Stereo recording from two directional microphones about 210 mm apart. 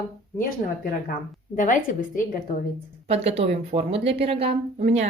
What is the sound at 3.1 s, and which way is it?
A woman's voice, 30° right (ahead or behind).